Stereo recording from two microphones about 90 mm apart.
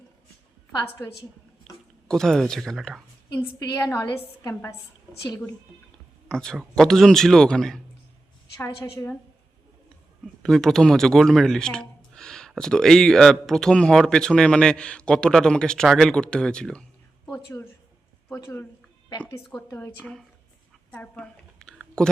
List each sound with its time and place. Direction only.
1.6 s speech: 5° left (ahead or behind)
3.6 s a woman's voice: 40° left (ahead or behind)
6.2 s a man's voice: 5° left (ahead or behind)
8.5 s a woman's voice: 30° left (ahead or behind)
10.4 s speech: 5° left (ahead or behind)
17.3 s a woman's voice: 30° left (ahead or behind)
19.5 s speech: 15° left (ahead or behind)
20.9 s a woman's voice: 20° left (ahead or behind)
21.6 s typing: 5° left (ahead or behind)